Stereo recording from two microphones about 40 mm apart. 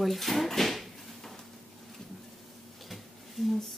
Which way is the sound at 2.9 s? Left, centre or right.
Centre.